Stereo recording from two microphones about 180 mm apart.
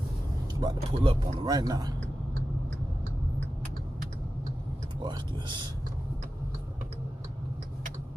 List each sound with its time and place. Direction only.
0.6 s speech: 30° right (ahead or behind)
5.0 s speech: 25° right (ahead or behind)